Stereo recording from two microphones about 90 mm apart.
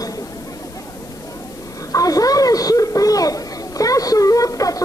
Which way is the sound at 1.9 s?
40° left (ahead or behind).